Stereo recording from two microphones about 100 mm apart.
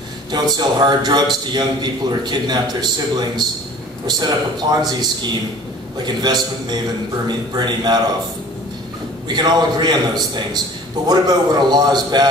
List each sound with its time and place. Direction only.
0.3 s a man's voice: 45° right (ahead or behind)
9.3 s a man's voice: 45° right (ahead or behind)